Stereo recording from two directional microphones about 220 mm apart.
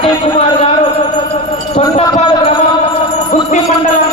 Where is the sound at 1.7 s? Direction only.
20° left (ahead or behind).